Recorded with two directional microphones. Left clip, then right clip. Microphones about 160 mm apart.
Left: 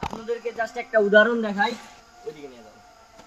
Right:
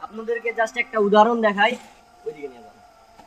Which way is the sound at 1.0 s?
60° right (ahead or behind).